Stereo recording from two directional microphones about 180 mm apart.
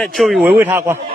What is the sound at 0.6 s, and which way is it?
Speech, 15° right (ahead or behind).